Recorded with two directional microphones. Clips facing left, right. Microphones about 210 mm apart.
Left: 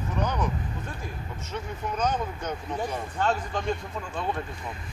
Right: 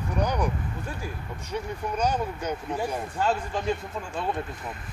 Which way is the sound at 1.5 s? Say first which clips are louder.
Right 2 dB; 10° right (ahead or behind).